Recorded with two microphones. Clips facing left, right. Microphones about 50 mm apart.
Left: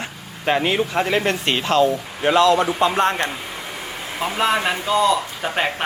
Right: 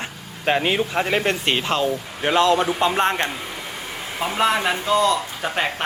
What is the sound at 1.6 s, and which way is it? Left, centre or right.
Speech, centre.